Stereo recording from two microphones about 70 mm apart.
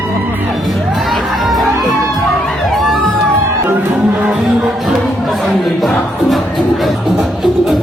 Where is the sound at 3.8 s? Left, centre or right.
Right.